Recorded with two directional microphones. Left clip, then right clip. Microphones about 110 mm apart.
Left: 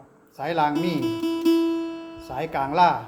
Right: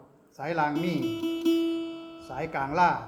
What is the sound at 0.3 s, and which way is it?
Music, 20° left (ahead or behind).